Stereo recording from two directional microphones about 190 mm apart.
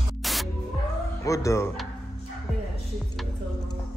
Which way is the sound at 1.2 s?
15° left (ahead or behind).